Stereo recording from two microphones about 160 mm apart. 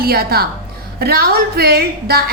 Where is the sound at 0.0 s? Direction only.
75° right (ahead or behind).